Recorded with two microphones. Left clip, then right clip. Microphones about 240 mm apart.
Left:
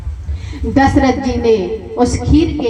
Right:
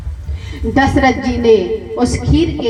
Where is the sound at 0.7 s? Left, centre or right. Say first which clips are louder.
Even; right.